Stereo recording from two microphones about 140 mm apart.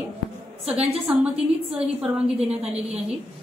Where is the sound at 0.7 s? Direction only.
10° right (ahead or behind).